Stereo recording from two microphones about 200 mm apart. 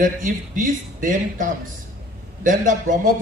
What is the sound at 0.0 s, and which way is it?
A man's voice, 40° right (ahead or behind).